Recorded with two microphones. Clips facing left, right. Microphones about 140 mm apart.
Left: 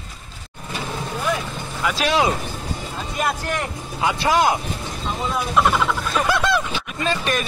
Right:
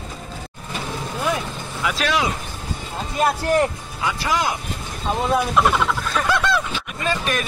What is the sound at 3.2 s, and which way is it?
Speech, 35° right (ahead or behind).